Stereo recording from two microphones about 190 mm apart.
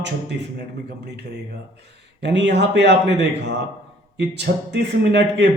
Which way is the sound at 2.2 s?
65° right (ahead or behind).